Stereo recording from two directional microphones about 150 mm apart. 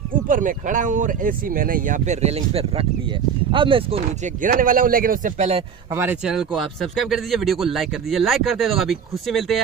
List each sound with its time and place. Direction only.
0.3 s speech: 60° right (ahead or behind); by 4.0 s 35° right (ahead or behind)
4.4 s a man's voice: 65° right (ahead or behind)
5.9 s a man's voice: 15° right (ahead or behind)
6.3 s speech: centre (ahead or behind)